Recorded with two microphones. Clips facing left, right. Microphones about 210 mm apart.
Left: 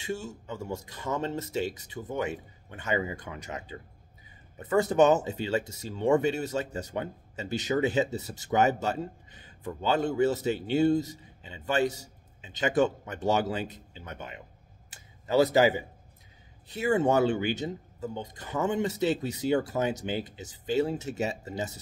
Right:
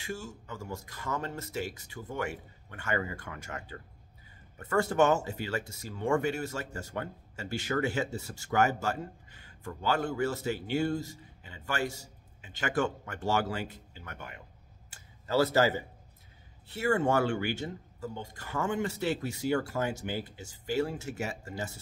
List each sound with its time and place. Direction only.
0.0 s speech: 20° left (ahead or behind)
14.9 s a sound: 20° left (ahead or behind)
16.6 s speech: 15° left (ahead or behind)